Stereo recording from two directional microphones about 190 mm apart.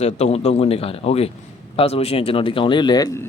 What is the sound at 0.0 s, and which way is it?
Speech, 35° left (ahead or behind).